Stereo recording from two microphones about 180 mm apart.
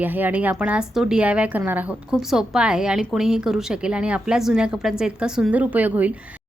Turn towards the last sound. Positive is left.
turn(degrees=-10)  # may be behind; listen again after turning